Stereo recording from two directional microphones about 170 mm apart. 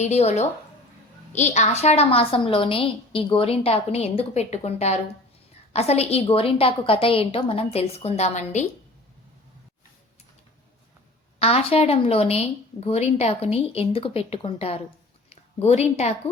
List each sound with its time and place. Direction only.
0.0 s a woman's voice: 40° left (ahead or behind)
11.3 s a woman's voice: 35° left (ahead or behind)